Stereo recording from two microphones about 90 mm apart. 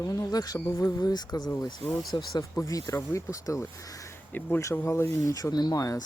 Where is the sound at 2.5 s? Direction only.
35° left (ahead or behind).